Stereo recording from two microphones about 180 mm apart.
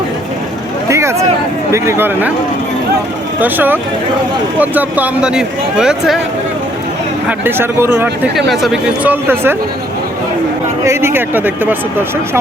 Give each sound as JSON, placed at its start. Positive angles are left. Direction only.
{"t": 0.9, "sound": "a sound", "side_deg": -15}
{"t": 1.7, "sound": "speech", "side_deg": -15}
{"t": 3.4, "sound": "speech", "side_deg": -10}
{"t": 7.3, "sound": "speech", "side_deg": -10}
{"t": 10.8, "sound": "speech", "side_deg": -10}